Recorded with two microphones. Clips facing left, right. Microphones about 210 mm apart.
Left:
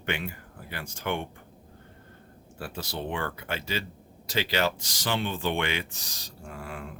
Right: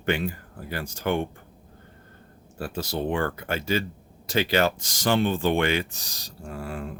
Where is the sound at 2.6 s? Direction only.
40° right (ahead or behind).